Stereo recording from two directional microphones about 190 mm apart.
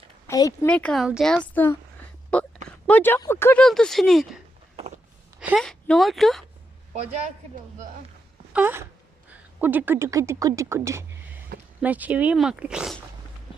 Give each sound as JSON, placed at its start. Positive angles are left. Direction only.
{"t": 0.3, "sound": "speech", "side_deg": 15}
{"t": 0.7, "sound": "speech", "side_deg": 5}
{"t": 8.5, "sound": "wail", "side_deg": -10}
{"t": 9.3, "sound": "speech", "side_deg": -10}